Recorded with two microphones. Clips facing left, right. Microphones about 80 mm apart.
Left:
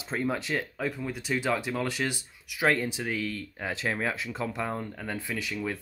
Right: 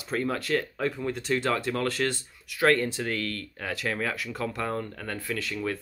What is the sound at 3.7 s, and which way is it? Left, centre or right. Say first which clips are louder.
Speech: even; left.